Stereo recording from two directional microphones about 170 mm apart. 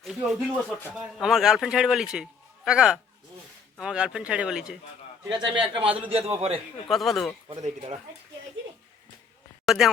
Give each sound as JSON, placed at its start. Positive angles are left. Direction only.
{"t": 0.0, "sound": "speech", "side_deg": 0}
{"t": 5.3, "sound": "a man's voice", "side_deg": -30}
{"t": 5.7, "sound": "a man's voice", "side_deg": -5}
{"t": 6.1, "sound": "a man's voice", "side_deg": -35}
{"t": 6.8, "sound": "speech", "side_deg": 0}
{"t": 7.5, "sound": "a man's voice", "side_deg": -40}
{"t": 9.6, "sound": "speech", "side_deg": 0}